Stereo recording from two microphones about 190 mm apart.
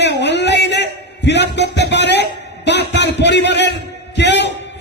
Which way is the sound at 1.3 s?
65° left (ahead or behind).